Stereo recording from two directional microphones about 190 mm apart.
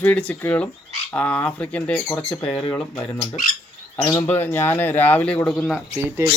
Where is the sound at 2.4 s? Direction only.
20° left (ahead or behind).